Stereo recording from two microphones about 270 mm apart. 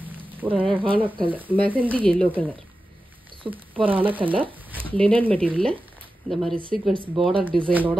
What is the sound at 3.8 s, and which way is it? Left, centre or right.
Speech, centre.